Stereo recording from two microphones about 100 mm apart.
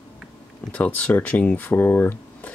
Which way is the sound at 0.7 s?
15° left (ahead or behind).